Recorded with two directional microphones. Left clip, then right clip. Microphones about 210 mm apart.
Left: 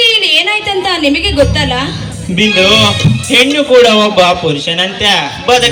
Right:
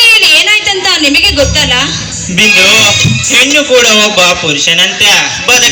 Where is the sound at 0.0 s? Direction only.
60° left (ahead or behind).